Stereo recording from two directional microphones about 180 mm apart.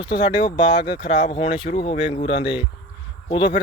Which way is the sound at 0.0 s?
25° left (ahead or behind).